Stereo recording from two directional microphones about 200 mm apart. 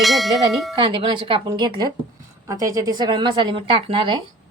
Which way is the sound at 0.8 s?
25° right (ahead or behind).